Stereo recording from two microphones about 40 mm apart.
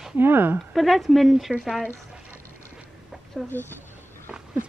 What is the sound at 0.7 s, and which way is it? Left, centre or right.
Speech, centre.